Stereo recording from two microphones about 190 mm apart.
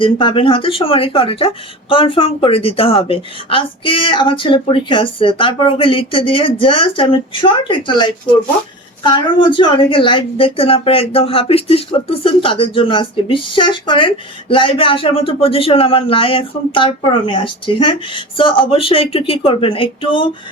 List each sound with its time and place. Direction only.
0.0 s speech: 25° left (ahead or behind)